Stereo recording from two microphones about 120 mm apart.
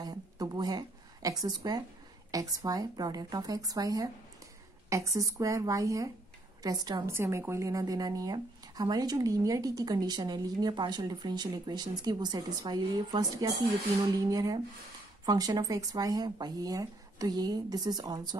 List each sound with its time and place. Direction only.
0.0 s a woman's voice: 35° right (ahead or behind)
7.1 s speech: 20° right (ahead or behind)